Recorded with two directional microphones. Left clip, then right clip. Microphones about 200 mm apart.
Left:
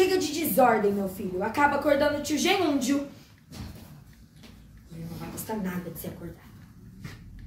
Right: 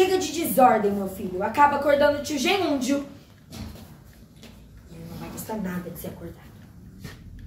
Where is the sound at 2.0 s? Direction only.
25° left (ahead or behind).